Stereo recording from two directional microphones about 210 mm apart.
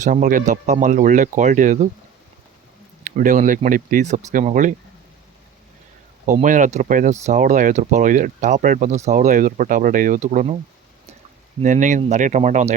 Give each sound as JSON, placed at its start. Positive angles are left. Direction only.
{"t": 0.0, "sound": "speech", "side_deg": -40}
{"t": 3.0, "sound": "speech", "side_deg": -35}
{"t": 6.2, "sound": "speech", "side_deg": -40}
{"t": 11.6, "sound": "speech", "side_deg": -35}